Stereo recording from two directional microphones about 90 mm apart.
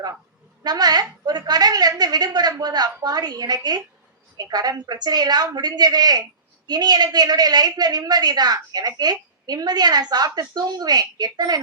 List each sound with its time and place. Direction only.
0.6 s a woman's voice: 50° right (ahead or behind)